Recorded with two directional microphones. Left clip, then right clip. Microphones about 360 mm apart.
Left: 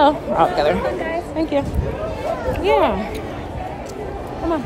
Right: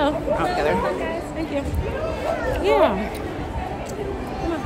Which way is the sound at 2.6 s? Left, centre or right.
Centre.